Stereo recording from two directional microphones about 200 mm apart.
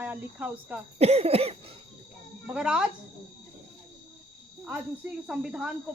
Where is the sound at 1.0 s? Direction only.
30° right (ahead or behind).